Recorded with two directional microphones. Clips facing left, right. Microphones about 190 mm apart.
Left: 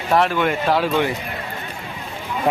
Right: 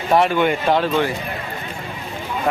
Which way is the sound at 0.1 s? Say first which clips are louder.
Right 2 dB; centre (ahead or behind).